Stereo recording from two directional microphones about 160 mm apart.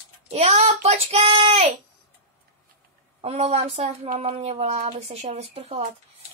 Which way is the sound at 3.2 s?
40° right (ahead or behind).